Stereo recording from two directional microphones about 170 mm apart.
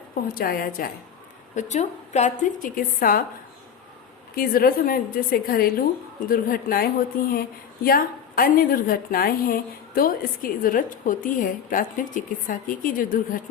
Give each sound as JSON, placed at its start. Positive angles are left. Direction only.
{"t": 0.1, "sound": "a woman's voice", "side_deg": 60}
{"t": 1.5, "sound": "a woman's voice", "side_deg": 45}
{"t": 4.4, "sound": "a woman's voice", "side_deg": 60}
{"t": 7.9, "sound": "a woman's voice", "side_deg": 55}